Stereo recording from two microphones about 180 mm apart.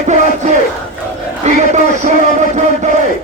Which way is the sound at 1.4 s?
40° right (ahead or behind).